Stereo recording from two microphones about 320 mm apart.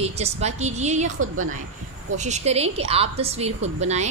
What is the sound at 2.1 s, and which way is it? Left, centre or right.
A woman's voice, right.